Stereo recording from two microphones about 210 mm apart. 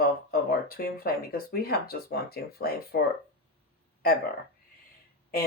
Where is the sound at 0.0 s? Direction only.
45° left (ahead or behind).